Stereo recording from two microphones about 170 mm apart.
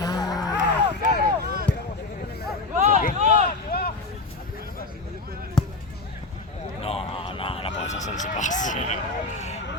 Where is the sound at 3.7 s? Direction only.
65° left (ahead or behind).